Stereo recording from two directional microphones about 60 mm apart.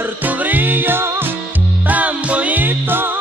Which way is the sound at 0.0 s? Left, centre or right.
Right.